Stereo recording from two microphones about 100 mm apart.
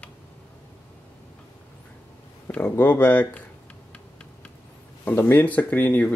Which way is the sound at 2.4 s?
20° left (ahead or behind).